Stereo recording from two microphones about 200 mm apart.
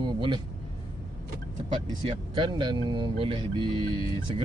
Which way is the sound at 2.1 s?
25° right (ahead or behind).